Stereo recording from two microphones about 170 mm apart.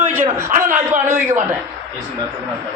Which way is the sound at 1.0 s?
45° right (ahead or behind).